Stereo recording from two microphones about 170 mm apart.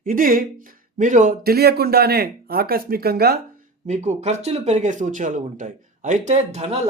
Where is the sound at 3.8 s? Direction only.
45° right (ahead or behind).